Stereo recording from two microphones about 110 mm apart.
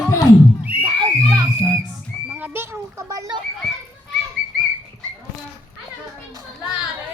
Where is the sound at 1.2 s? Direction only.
30° right (ahead or behind).